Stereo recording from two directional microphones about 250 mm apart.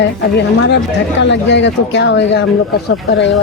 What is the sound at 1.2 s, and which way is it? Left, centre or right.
Speech, left.